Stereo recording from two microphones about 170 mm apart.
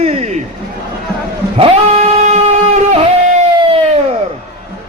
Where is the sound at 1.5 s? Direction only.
35° right (ahead or behind).